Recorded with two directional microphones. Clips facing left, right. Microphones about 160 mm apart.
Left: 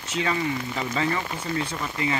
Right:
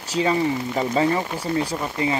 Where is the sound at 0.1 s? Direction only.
35° right (ahead or behind).